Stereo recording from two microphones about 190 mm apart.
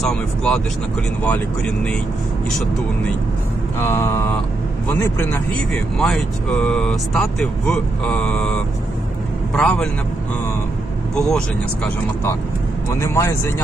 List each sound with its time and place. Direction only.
0.0 s speech: 5° left (ahead or behind)
3.8 s speech: 15° left (ahead or behind)
11.3 s speech: 5° left (ahead or behind)